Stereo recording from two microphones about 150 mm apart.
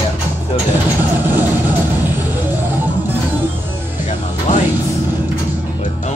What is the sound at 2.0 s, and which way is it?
Music, 15° right (ahead or behind).